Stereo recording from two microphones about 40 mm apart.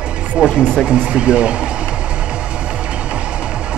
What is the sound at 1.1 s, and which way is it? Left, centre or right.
Speech, right.